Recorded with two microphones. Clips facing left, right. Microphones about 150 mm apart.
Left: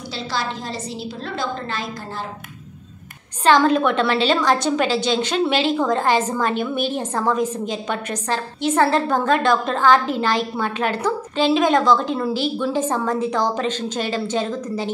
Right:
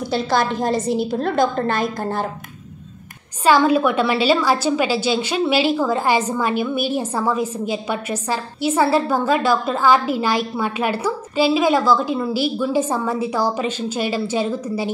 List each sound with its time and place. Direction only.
0.1 s a woman's voice: 50° right (ahead or behind)
3.4 s a woman's voice: 10° right (ahead or behind)